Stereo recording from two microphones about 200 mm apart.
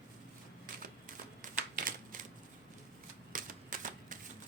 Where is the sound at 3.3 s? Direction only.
40° right (ahead or behind).